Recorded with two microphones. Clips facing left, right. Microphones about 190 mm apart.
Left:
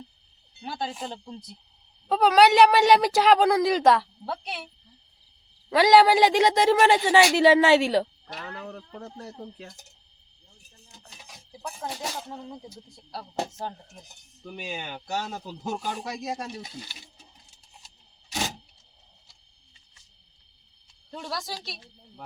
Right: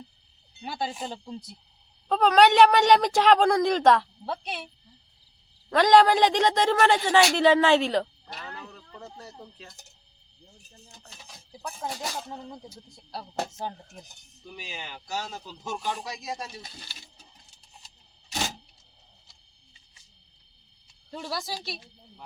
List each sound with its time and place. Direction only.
0.6 s a woman's voice: 10° right (ahead or behind)
5.7 s speech: 5° left (ahead or behind)
8.5 s speech: 50° left (ahead or behind)
11.8 s a woman's voice: centre (ahead or behind)
14.4 s speech: 60° left (ahead or behind)
15.6 s speech: 40° left (ahead or behind)
16.6 s speech: 15° left (ahead or behind)
21.1 s a woman's voice: 5° right (ahead or behind)